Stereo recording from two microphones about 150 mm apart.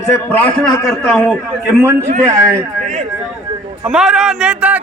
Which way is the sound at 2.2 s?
20° right (ahead or behind).